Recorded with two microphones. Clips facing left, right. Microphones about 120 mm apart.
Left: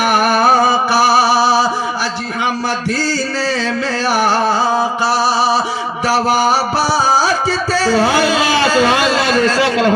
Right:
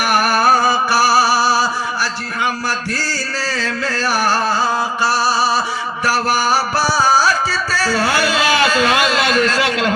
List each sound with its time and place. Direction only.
0.1 s music: 20° left (ahead or behind)
4.0 s music: 20° left (ahead or behind)
8.4 s a man's voice: 35° left (ahead or behind)